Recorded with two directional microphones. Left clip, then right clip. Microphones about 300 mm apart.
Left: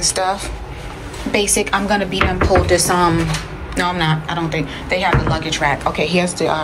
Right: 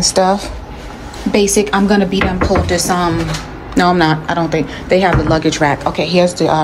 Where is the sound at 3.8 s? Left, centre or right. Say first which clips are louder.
Right 6 dB; centre.